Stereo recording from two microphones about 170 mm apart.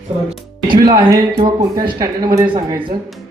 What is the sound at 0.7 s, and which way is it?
Speech, 25° right (ahead or behind).